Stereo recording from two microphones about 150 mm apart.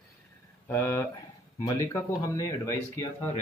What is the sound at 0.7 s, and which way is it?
Speech, 20° left (ahead or behind).